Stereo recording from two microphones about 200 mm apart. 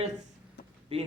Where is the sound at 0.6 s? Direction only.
60° left (ahead or behind).